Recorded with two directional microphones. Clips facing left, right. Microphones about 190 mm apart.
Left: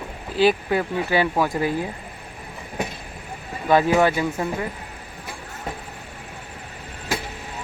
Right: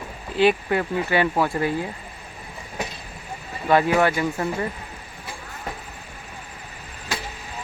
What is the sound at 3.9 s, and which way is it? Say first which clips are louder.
Speech: left 1 dB; 15° left (ahead or behind).